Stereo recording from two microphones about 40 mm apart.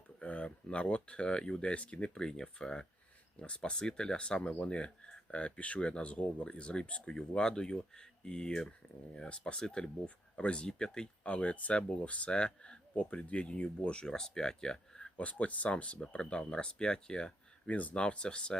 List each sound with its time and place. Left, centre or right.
0.2 s speech: left
1.7 s speech: left
7.2 s speech: centre
11.3 s speech: left
12.3 s speech: left
13.0 s speech: left; by 15.1 s centre
15.2 s speech: left
17.7 s speech: left
17.9 s speech: left